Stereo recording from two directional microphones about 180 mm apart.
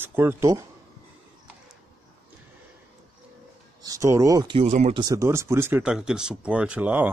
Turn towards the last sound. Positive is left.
turn(degrees=-10)  # may be behind; listen again after turning